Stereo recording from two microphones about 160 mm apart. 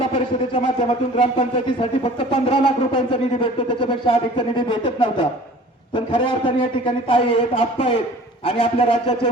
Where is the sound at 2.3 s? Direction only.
35° left (ahead or behind).